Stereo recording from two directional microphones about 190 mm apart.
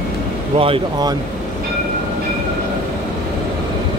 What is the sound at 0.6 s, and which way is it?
Speech, 25° right (ahead or behind).